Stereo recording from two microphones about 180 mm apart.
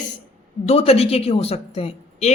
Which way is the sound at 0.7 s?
35° left (ahead or behind).